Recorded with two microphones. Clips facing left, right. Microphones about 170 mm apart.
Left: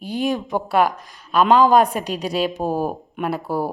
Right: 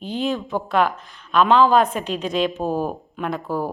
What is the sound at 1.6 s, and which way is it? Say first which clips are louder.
Speech: left 2 dB; 10° left (ahead or behind).